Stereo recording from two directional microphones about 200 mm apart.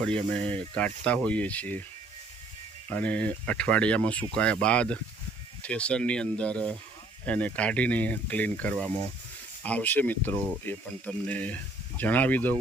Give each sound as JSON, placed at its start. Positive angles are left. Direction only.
{"t": 0.0, "sound": "speech", "side_deg": 5}
{"t": 2.9, "sound": "speech", "side_deg": 5}